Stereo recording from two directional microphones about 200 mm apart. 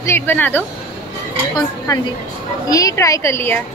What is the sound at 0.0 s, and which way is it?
Speech, 10° left (ahead or behind).